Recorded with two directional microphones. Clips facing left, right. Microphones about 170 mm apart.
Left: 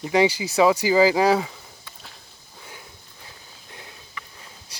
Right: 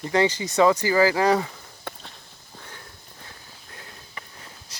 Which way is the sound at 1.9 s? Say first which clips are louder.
Right 11 dB; 60° right (ahead or behind).